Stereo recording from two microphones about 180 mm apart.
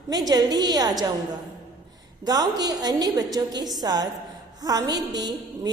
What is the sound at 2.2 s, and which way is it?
A woman's voice, 20° right (ahead or behind).